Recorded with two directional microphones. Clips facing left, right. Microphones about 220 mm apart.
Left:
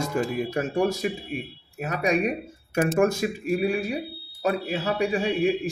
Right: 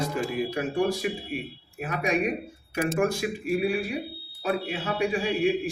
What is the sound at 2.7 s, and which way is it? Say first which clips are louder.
Speech: left 4 dB; 45° left (ahead or behind).